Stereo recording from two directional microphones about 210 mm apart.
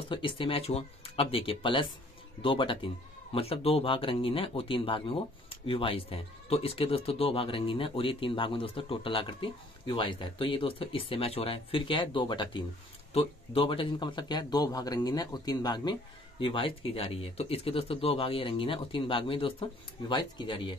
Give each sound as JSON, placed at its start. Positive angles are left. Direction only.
{"t": 0.1, "sound": "speech", "side_deg": 25}